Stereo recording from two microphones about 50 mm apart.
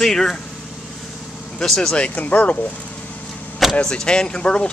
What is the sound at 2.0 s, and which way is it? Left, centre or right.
Speech, left.